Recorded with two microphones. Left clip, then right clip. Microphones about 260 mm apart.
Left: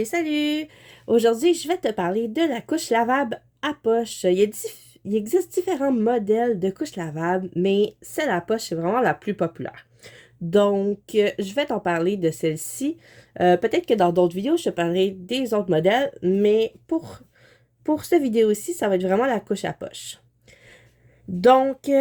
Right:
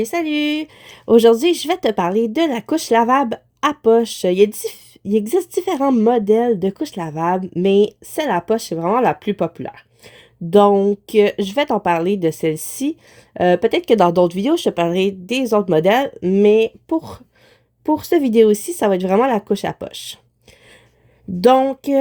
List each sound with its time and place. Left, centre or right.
0.0 s a woman's voice: right
21.4 s a woman's voice: right